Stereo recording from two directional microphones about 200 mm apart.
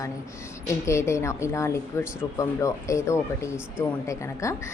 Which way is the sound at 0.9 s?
15° left (ahead or behind).